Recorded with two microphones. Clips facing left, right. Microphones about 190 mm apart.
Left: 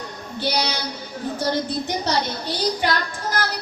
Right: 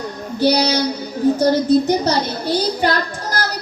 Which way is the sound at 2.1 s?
40° right (ahead or behind).